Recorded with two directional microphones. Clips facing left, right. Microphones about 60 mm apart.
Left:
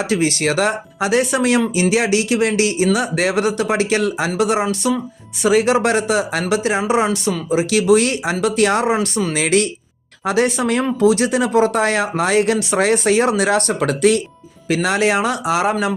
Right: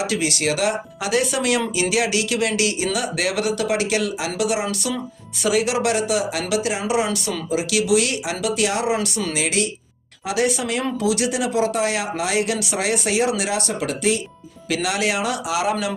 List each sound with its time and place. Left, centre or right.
0.0 s speech: left
10.2 s speech: left
14.7 s speech: left